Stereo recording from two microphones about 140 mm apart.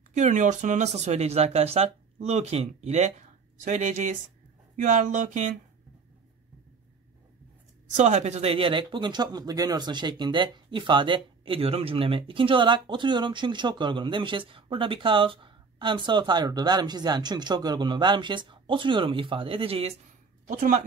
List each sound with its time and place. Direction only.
0.1 s speech: 60° right (ahead or behind)
7.9 s speech: 55° right (ahead or behind)
20.4 s speech: 70° right (ahead or behind)